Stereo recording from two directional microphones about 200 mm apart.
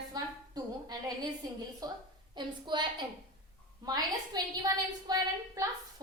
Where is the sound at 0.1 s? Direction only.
20° right (ahead or behind).